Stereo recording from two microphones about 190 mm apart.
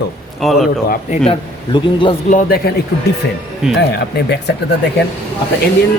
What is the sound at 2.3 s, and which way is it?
Speech, 45° left (ahead or behind).